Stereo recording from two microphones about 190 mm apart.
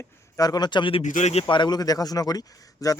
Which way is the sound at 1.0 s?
40° left (ahead or behind).